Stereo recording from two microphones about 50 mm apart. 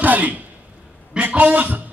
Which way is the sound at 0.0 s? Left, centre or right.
Right.